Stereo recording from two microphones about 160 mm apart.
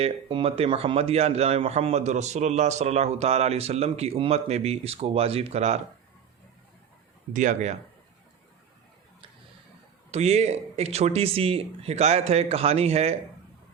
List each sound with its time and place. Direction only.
0.0 s speech: 35° right (ahead or behind)
7.3 s speech: 50° right (ahead or behind)
10.1 s speech: 40° right (ahead or behind)